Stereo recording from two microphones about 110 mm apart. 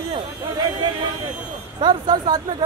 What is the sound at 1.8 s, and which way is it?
Speech, 40° right (ahead or behind).